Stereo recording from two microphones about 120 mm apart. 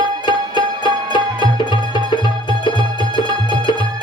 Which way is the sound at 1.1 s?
40° left (ahead or behind).